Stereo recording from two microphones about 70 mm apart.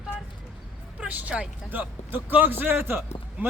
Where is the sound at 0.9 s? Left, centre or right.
Right.